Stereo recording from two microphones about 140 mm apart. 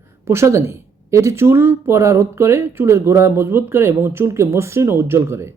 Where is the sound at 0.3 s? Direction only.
20° right (ahead or behind).